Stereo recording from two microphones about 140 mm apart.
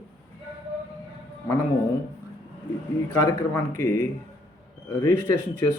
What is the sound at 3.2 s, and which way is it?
Speech, 20° left (ahead or behind).